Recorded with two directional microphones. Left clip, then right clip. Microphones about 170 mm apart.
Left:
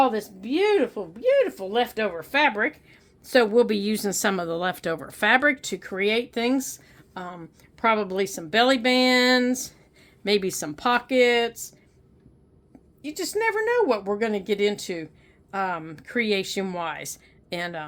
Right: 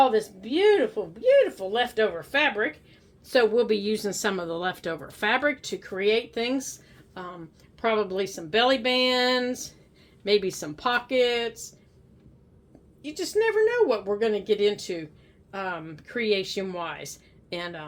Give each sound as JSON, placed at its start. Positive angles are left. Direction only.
{"t": 0.0, "sound": "a woman's voice", "side_deg": 60}
{"t": 13.0, "sound": "a woman's voice", "side_deg": 65}